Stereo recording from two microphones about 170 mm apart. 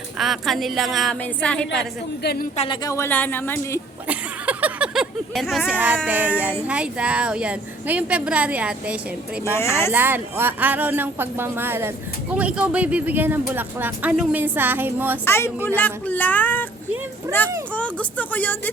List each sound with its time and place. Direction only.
0.2 s a woman's voice: centre (ahead or behind)
2.2 s speech: 65° left (ahead or behind)
2.8 s speech: 15° left (ahead or behind)
4.0 s a woman's voice: 10° right (ahead or behind)
9.6 s speech: 15° left (ahead or behind)
9.9 s a woman's voice: 10° right (ahead or behind)
15.2 s speech: 15° left (ahead or behind)
17.3 s a woman's voice: 15° right (ahead or behind)
17.7 s speech: 5° left (ahead or behind)